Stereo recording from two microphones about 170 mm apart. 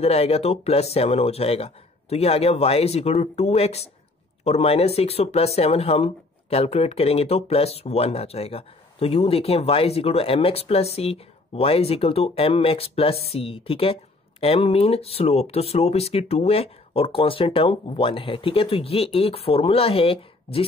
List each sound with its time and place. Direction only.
0.0 s speech: 35° left (ahead or behind)